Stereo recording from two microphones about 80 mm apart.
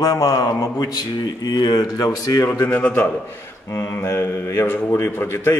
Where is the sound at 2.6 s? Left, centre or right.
Left.